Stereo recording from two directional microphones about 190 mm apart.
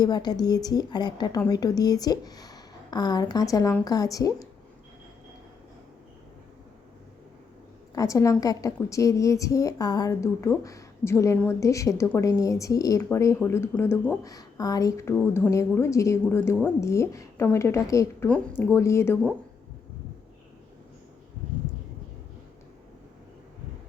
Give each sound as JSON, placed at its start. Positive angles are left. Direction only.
{"t": 0.0, "sound": "a woman's voice", "side_deg": 20}
{"t": 7.9, "sound": "a woman's voice", "side_deg": 15}